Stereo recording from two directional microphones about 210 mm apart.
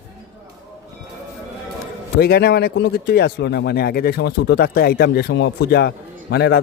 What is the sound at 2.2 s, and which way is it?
Speech, 50° left (ahead or behind).